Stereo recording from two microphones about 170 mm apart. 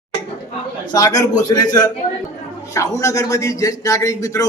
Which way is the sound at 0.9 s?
20° left (ahead or behind).